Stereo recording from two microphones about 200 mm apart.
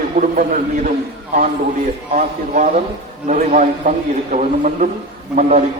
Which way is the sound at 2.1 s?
40° right (ahead or behind).